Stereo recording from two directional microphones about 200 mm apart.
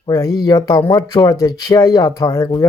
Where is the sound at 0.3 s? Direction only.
20° left (ahead or behind).